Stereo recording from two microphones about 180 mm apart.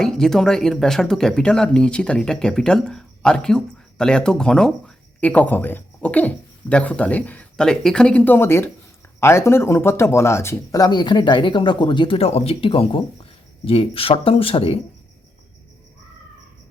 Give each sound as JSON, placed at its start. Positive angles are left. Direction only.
{"t": 0.0, "sound": "speech", "side_deg": 5}